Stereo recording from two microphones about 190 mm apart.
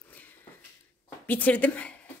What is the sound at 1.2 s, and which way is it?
Speech, 10° left (ahead or behind).